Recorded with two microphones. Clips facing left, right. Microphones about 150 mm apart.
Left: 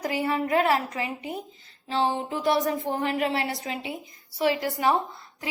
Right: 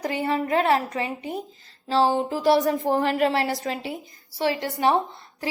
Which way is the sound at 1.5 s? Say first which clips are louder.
Right 6 dB; 40° right (ahead or behind).